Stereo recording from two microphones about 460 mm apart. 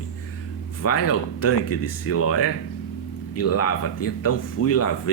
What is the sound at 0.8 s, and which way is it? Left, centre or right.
Speech, left.